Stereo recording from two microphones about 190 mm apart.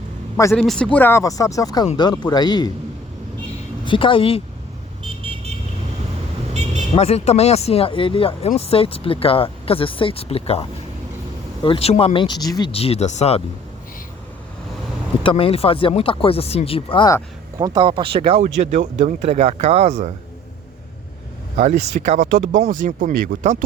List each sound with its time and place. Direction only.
0.5 s speech: 5° left (ahead or behind); by 2.7 s 20° left (ahead or behind)
3.8 s speech: 25° left (ahead or behind)
6.5 s vehicle: 35° right (ahead or behind)
6.9 s speech: 30° left (ahead or behind)
15.2 s speech: 30° left (ahead or behind)
17.6 s speech: 25° right (ahead or behind)
21.6 s speech: 40° right (ahead or behind)